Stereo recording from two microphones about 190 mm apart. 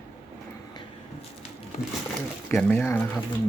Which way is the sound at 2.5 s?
5° left (ahead or behind).